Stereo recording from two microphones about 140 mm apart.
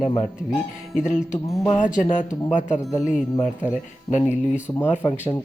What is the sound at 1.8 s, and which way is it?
Speech, 65° left (ahead or behind).